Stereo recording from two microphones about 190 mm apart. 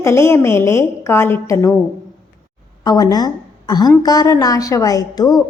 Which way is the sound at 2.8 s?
20° left (ahead or behind).